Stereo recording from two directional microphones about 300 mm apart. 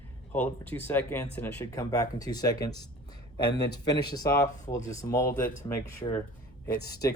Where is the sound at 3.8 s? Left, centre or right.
Centre.